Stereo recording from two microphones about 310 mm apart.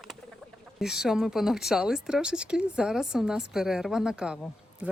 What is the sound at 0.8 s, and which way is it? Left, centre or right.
Speech, centre.